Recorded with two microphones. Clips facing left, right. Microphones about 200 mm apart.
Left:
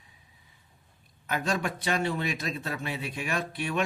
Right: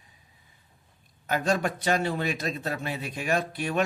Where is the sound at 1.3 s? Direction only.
40° right (ahead or behind).